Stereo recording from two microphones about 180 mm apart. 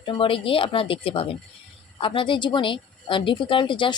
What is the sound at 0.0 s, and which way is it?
A woman's voice, 30° left (ahead or behind).